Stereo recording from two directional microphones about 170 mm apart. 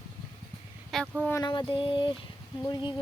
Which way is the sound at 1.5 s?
30° left (ahead or behind).